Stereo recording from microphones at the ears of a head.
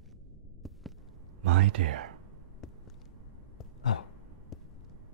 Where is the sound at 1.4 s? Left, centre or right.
Right.